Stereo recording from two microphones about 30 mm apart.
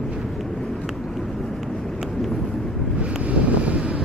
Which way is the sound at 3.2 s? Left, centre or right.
Right.